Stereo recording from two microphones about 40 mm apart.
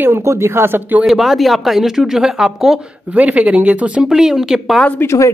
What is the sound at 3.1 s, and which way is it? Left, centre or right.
Speech, right.